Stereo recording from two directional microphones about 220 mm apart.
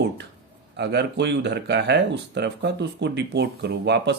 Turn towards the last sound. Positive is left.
turn(degrees=-50)  # may be behind; listen again after turning